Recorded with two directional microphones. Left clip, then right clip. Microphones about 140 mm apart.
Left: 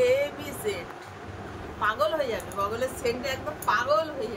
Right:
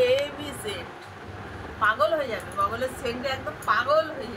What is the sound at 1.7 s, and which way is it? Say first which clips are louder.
A woman's voice: right 3 dB; 15° left (ahead or behind).